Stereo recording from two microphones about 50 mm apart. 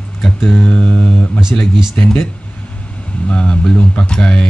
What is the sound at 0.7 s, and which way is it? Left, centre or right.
Mantra, left.